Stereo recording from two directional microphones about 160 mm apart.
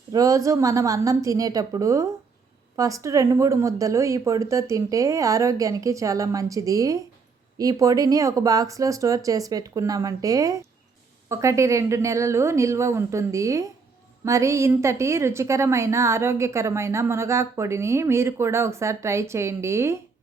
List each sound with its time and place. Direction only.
0.1 s a woman's voice: 20° right (ahead or behind)